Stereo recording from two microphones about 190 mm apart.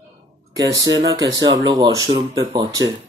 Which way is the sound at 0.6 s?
20° right (ahead or behind).